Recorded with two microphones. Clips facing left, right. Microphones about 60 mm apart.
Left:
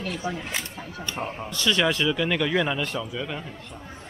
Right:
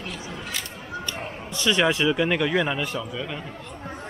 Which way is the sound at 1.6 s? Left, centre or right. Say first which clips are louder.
Right 2 dB; centre.